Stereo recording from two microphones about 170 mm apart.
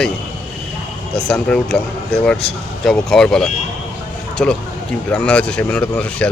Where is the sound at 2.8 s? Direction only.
Centre (ahead or behind).